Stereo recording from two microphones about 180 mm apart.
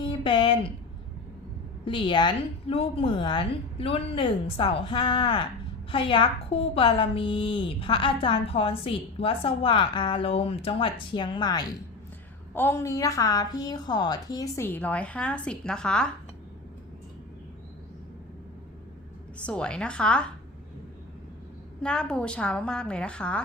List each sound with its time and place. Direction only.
0.0 s a sound: 30° left (ahead or behind)
1.8 s a woman's voice: 30° left (ahead or behind)
12.5 s a woman's voice: 15° left (ahead or behind)
19.5 s a woman's voice: 5° left (ahead or behind)
21.8 s a woman's voice: 5° left (ahead or behind)